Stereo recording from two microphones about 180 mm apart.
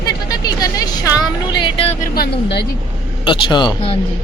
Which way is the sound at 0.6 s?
20° left (ahead or behind).